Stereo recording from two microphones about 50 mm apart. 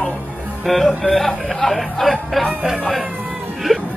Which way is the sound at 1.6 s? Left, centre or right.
Centre.